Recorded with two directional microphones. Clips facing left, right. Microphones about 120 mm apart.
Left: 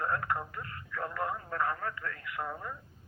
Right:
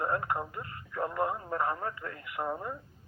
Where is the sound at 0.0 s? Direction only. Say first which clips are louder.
Right 2 dB; 20° right (ahead or behind).